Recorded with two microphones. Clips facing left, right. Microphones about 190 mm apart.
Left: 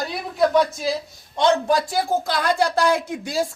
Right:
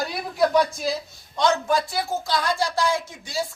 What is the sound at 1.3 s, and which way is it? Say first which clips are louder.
A woman's voice: left 3 dB; 30° left (ahead or behind).